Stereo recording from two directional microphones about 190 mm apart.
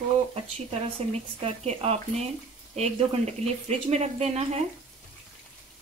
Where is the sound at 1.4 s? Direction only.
35° right (ahead or behind).